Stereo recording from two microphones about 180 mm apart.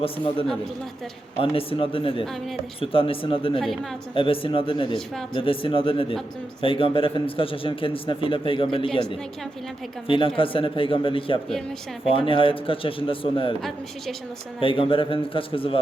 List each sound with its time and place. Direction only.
1.4 s a man's voice: 30° left (ahead or behind)
2.2 s a woman's voice: centre (ahead or behind)
2.8 s a man's voice: 30° left (ahead or behind)
13.6 s a woman's voice: centre (ahead or behind)
14.6 s a man's voice: 30° left (ahead or behind)